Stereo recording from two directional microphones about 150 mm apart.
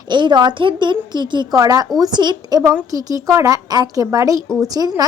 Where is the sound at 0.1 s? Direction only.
30° right (ahead or behind).